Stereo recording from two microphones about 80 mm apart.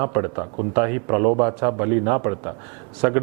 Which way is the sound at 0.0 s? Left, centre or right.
Right.